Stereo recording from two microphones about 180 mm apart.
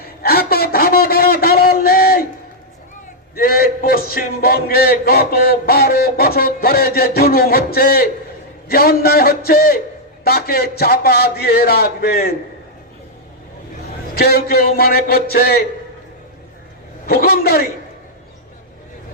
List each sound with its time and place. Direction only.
0.2 s a sound: 60° left (ahead or behind)
3.3 s a man's voice: 55° left (ahead or behind)
14.2 s a man's voice: 60° left (ahead or behind)
17.1 s a man's voice: 55° left (ahead or behind)